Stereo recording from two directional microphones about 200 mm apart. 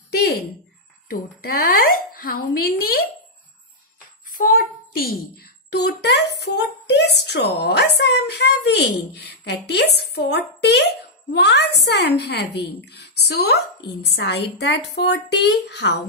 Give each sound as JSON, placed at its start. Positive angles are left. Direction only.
{"t": 0.1, "sound": "a sound", "side_deg": 55}
{"t": 1.0, "sound": "a woman's voice", "side_deg": 45}
{"t": 4.3, "sound": "a child's voice", "side_deg": 45}